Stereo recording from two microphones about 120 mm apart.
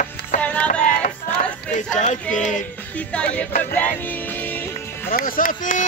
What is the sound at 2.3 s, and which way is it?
Music, 90° left.